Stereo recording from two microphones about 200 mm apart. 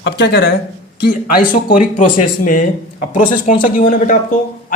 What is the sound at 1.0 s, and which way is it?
Speech, 45° left (ahead or behind).